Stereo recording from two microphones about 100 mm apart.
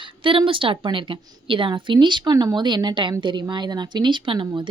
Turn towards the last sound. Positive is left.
turn(degrees=-55)  # may be behind; listen again after turning